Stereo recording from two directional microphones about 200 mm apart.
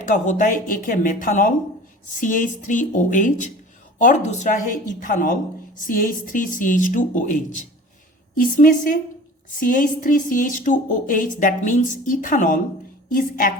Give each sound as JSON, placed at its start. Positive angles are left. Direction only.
{"t": 0.1, "sound": "a woman's voice", "side_deg": 40}